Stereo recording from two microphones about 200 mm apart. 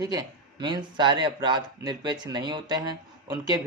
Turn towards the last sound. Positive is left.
turn(degrees=-20)  # may be behind; listen again after turning